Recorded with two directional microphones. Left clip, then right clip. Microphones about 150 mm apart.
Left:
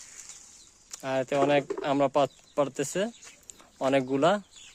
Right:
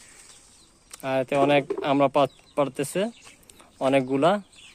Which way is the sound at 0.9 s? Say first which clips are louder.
Right 3 dB; 20° left (ahead or behind).